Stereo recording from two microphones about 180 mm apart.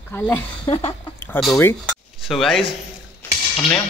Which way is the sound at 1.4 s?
10° left (ahead or behind).